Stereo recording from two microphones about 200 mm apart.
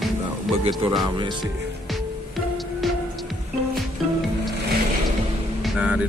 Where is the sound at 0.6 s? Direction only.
20° right (ahead or behind).